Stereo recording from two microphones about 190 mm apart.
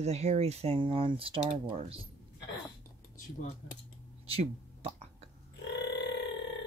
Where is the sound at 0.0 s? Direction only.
35° right (ahead or behind).